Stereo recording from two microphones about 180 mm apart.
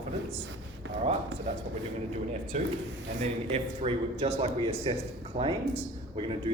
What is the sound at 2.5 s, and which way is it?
Speech, 40° right (ahead or behind).